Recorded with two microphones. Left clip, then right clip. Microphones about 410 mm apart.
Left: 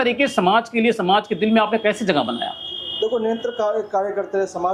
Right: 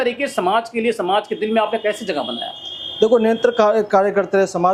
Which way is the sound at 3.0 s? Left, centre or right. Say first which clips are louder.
Right 8 dB; right.